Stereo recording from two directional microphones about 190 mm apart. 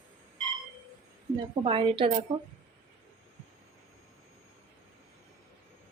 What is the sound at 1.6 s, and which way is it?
Speech, 25° right (ahead or behind).